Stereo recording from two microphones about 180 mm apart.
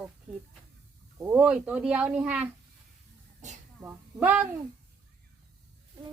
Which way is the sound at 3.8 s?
10° right (ahead or behind).